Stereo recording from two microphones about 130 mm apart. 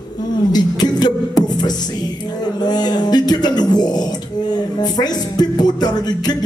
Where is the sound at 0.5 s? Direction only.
30° left (ahead or behind).